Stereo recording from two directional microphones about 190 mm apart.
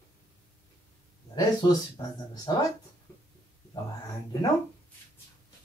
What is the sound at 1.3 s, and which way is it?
Speech, 20° left (ahead or behind).